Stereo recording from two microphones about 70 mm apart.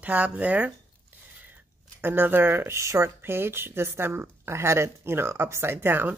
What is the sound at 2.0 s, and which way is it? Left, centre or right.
Speech, right.